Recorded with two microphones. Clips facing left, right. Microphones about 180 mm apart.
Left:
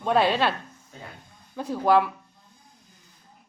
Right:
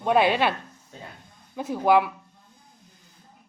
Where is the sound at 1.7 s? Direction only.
15° right (ahead or behind).